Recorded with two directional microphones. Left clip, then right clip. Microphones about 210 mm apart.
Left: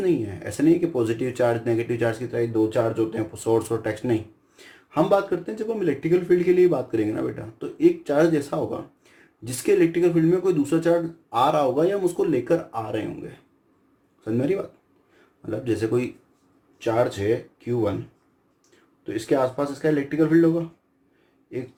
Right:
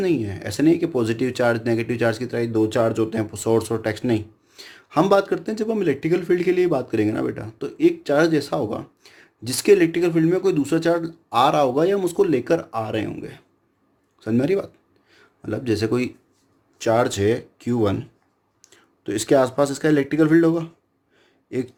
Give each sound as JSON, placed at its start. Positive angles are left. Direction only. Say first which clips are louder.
{"t": 0.0, "sound": "speech", "louder": "right 1 dB", "side_deg": -40}
{"t": 19.0, "sound": "speech", "louder": "right 4 dB", "side_deg": -50}